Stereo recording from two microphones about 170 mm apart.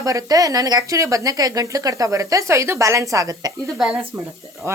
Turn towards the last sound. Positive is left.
turn(degrees=-15)  # may be behind; listen again after turning